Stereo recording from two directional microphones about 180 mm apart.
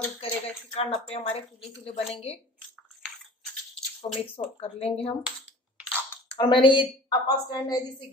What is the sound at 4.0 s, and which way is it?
A woman's voice, 30° left (ahead or behind).